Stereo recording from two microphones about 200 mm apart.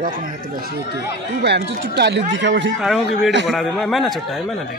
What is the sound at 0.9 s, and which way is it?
A man's voice, 55° right (ahead or behind).